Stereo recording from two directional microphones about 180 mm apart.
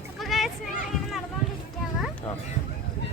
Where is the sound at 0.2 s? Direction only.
Centre (ahead or behind).